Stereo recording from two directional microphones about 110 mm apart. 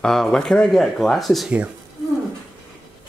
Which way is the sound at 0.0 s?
5° left (ahead or behind).